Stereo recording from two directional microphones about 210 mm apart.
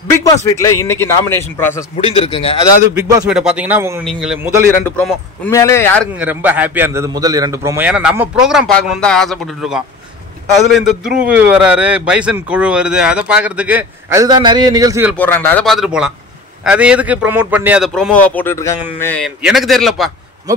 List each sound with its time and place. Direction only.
0.2 s a man's voice: 15° left (ahead or behind)
2.0 s a man's voice: 25° left (ahead or behind)
2.9 s a man's voice: 15° right (ahead or behind)
3.3 s a man's voice: 5° right (ahead or behind)
6.1 s a man's voice: 10° right (ahead or behind)
15.1 s a man's voice: 10° left (ahead or behind)